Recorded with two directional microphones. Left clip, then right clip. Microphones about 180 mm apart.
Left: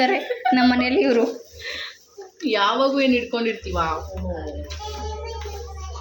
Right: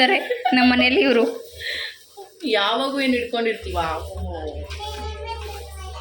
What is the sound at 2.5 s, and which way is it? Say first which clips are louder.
Speech: left 1 dB; 35° left (ahead or behind).